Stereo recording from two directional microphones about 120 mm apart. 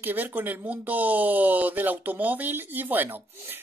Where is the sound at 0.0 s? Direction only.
15° right (ahead or behind).